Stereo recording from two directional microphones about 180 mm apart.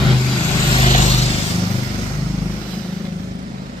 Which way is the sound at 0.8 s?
40° left (ahead or behind).